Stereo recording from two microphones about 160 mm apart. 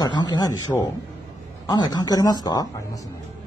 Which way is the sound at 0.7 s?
10° left (ahead or behind).